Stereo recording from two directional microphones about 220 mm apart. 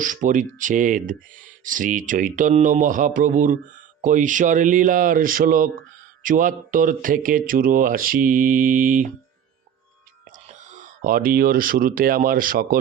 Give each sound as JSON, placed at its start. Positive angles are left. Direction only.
{"t": 0.0, "sound": "speech", "side_deg": -35}
{"t": 10.3, "sound": "speech", "side_deg": -35}